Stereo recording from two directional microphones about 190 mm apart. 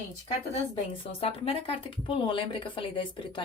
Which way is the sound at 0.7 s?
30° left (ahead or behind).